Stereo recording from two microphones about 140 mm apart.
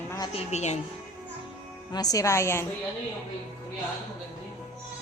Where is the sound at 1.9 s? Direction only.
25° left (ahead or behind).